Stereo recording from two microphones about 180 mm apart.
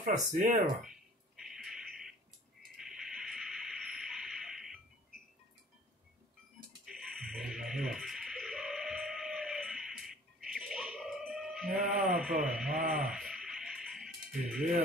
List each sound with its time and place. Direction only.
0.0 s speech: 45° right (ahead or behind)
0.8 s a sound: centre (ahead or behind)
6.9 s music: centre (ahead or behind)
11.7 s speech: 50° right (ahead or behind)
12.4 s speech: centre (ahead or behind)
13.0 s music: centre (ahead or behind)